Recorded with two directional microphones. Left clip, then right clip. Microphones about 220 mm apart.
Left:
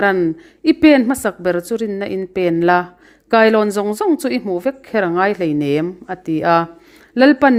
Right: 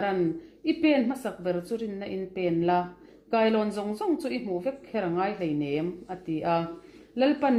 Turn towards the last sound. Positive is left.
turn(degrees=40)  # may be behind; listen again after turning